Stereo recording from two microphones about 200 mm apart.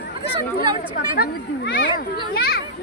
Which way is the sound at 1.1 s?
55° left (ahead or behind).